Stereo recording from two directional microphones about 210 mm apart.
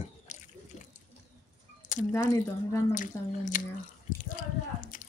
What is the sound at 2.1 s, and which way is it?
Speech, 15° left (ahead or behind).